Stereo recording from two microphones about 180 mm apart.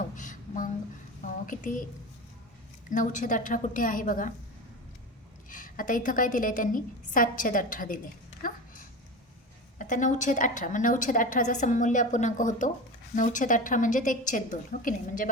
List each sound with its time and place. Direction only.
0.0 s a sound: 45° left (ahead or behind)
1.2 s a woman's voice: 45° left (ahead or behind)
2.9 s a woman's voice: 45° left (ahead or behind)
5.5 s a woman's voice: 50° left (ahead or behind)
9.7 s a woman's voice: 45° left (ahead or behind)